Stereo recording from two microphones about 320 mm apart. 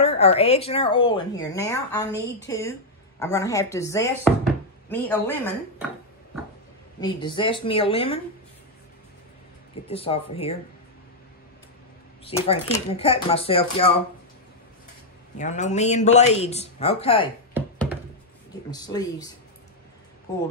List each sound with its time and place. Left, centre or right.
0.2 s a woman's voice: centre
4.8 s dishes: centre
7.2 s a woman's voice: centre
9.8 s a woman's voice: centre
12.3 s a woman's voice: centre
15.3 s speech: left
17.6 s a sound: centre
18.7 s a woman's voice: centre